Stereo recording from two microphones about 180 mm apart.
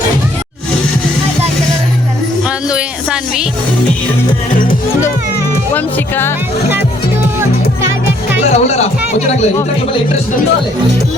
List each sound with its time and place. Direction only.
2.6 s music: 5° right (ahead or behind)
5.7 s speech: 10° left (ahead or behind)
8.4 s speech: 35° left (ahead or behind)